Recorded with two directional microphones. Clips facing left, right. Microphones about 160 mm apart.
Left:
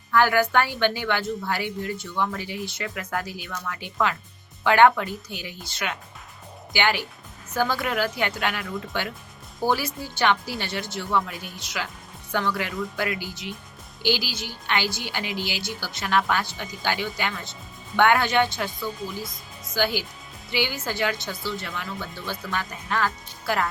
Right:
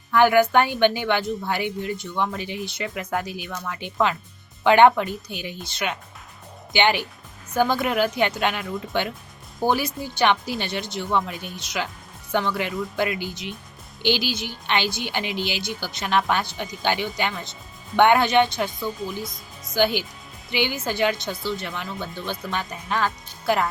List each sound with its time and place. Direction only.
0.1 s a woman's voice: 20° right (ahead or behind)